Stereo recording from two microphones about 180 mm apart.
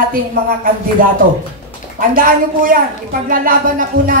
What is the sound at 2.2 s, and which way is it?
Speech, 50° right (ahead or behind).